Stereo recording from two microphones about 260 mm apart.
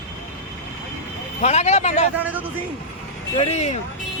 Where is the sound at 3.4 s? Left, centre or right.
Left.